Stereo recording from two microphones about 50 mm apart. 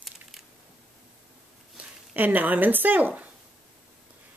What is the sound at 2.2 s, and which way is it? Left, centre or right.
A woman's voice, right.